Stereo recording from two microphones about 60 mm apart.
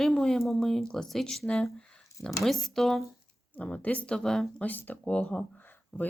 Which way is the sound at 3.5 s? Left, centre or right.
Left.